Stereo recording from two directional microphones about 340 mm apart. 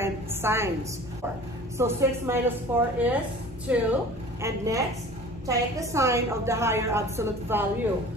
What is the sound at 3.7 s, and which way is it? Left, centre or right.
A woman's voice, centre.